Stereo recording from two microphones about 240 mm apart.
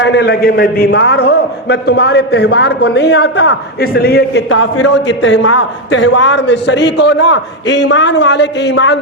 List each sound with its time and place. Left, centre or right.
0.0 s a man's voice: left